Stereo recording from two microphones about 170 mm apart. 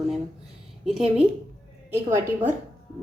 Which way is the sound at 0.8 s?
5° right (ahead or behind).